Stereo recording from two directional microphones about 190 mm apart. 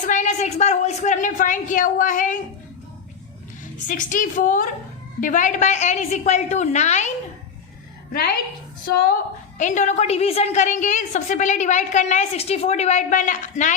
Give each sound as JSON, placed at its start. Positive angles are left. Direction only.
{"t": 0.0, "sound": "a woman's voice", "side_deg": 40}
{"t": 3.8, "sound": "a woman's voice", "side_deg": 45}
{"t": 9.6, "sound": "a woman's voice", "side_deg": 40}